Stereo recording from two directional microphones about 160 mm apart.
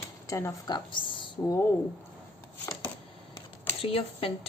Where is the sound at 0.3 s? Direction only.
20° left (ahead or behind).